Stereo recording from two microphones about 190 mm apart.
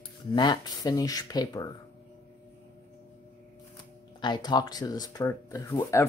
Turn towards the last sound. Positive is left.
turn(degrees=15)  # may be behind; listen again after turning